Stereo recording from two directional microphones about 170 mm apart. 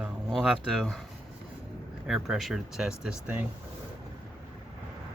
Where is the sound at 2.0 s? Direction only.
5° right (ahead or behind).